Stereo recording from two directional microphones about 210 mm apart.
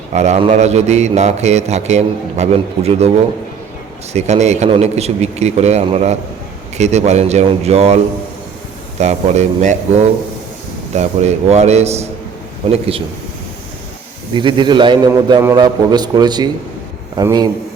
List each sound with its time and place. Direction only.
0.1 s a man's voice: 35° right (ahead or behind)
14.3 s a man's voice: 20° right (ahead or behind)